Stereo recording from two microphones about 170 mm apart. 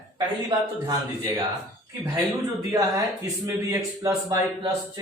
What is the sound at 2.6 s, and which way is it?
A man's voice, 20° right (ahead or behind).